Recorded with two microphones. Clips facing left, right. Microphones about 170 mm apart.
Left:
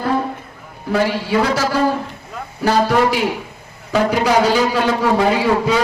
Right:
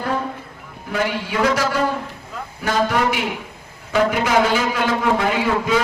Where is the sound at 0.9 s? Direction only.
35° left (ahead or behind).